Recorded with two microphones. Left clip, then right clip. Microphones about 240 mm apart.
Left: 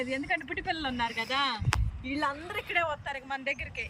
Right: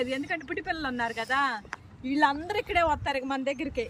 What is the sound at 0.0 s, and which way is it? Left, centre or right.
Speech, centre.